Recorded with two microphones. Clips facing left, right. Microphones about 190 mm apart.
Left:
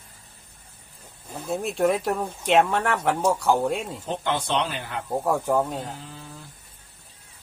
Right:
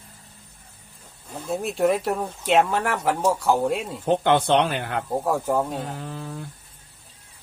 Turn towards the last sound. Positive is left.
turn(degrees=-60)  # may be behind; listen again after turning